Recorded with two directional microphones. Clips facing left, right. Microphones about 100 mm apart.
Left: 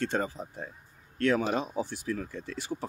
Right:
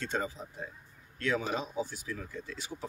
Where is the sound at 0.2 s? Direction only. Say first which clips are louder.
Left 3 dB; 50° left (ahead or behind).